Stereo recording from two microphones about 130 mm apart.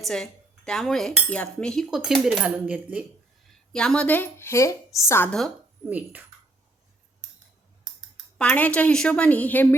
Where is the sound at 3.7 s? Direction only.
5° left (ahead or behind).